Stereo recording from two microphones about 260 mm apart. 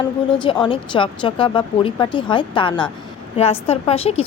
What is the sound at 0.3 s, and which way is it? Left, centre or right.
A woman's voice, centre.